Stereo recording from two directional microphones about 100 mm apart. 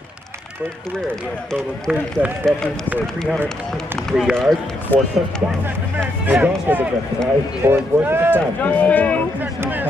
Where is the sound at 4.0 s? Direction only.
5° left (ahead or behind).